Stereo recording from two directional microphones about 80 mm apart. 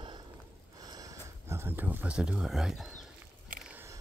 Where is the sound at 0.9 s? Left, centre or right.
Right; by 2.8 s centre.